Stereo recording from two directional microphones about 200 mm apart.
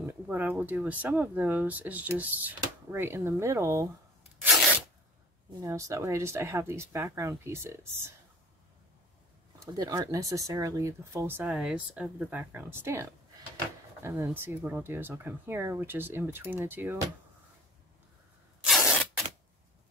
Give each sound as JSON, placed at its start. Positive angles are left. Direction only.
{"t": 0.0, "sound": "speech", "side_deg": -10}
{"t": 5.6, "sound": "speech", "side_deg": -15}
{"t": 9.6, "sound": "speech", "side_deg": -20}
{"t": 18.6, "sound": "a sound", "side_deg": 0}